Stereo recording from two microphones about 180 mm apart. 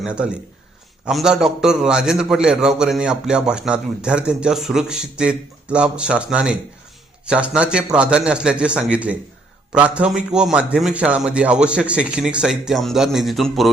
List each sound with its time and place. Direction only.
0.0 s a man's voice: 5° right (ahead or behind)